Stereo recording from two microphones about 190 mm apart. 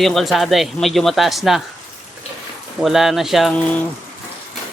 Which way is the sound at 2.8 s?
Centre (ahead or behind).